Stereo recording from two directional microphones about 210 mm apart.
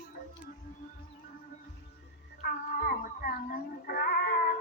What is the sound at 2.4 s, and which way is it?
Cat, 45° left (ahead or behind).